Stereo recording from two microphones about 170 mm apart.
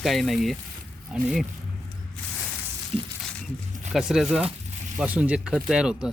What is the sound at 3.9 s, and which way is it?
Speech, 5° right (ahead or behind).